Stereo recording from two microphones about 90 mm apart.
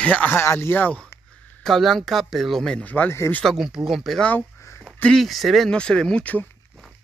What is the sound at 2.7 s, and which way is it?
Speech, 20° left (ahead or behind).